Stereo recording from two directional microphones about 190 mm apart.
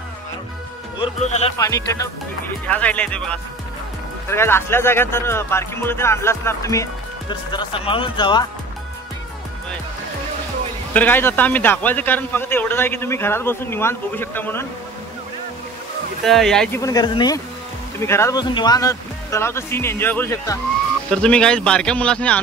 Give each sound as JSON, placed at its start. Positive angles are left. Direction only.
{"t": 1.0, "sound": "speech", "side_deg": 35}
{"t": 1.6, "sound": "speech", "side_deg": 15}
{"t": 10.9, "sound": "speech", "side_deg": 10}
{"t": 16.3, "sound": "speech", "side_deg": 0}
{"t": 16.8, "sound": "speech", "side_deg": 20}